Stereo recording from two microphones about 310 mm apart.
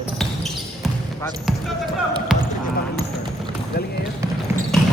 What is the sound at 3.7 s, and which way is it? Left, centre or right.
Speech, left.